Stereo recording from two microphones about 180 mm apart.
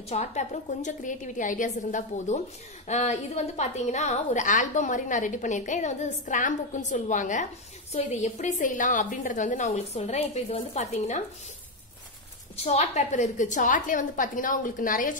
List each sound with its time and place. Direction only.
0.1 s a woman's voice: 40° left (ahead or behind)
12.5 s a woman's voice: 40° left (ahead or behind)